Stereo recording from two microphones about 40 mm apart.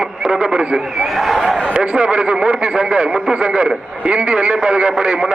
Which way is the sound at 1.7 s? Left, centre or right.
Right.